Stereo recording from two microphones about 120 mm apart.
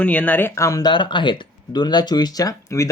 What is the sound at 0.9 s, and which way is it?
Speech, 40° left (ahead or behind).